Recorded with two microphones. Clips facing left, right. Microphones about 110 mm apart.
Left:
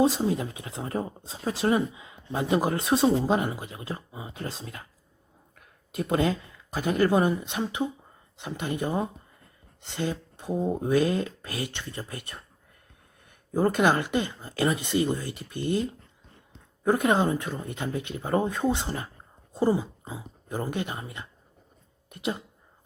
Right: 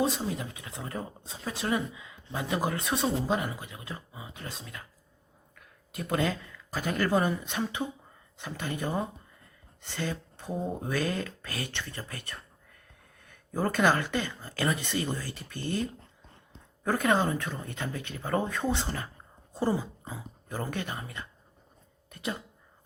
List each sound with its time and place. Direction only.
0.0 s speech: 30° left (ahead or behind)
13.5 s speech: 25° left (ahead or behind)